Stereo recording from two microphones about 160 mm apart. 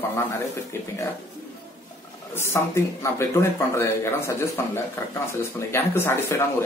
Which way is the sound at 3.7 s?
15° left (ahead or behind).